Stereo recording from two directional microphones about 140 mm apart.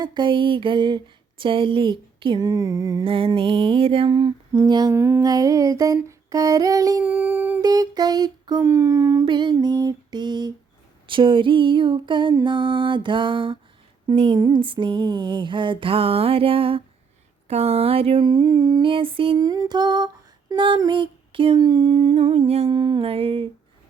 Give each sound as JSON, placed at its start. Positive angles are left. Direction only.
{"t": 0.0, "sound": "humming", "side_deg": -35}
{"t": 2.5, "sound": "music", "side_deg": -25}
{"t": 3.0, "sound": "music", "side_deg": -40}
{"t": 7.0, "sound": "humming", "side_deg": -10}
{"t": 7.6, "sound": "music", "side_deg": -30}
{"t": 11.0, "sound": "humming", "side_deg": -35}